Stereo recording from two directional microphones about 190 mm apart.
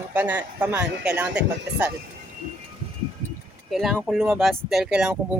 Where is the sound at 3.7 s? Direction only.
Centre (ahead or behind).